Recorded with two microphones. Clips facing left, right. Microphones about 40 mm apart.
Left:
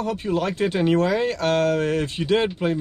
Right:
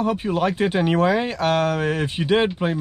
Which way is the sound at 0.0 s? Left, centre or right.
Centre.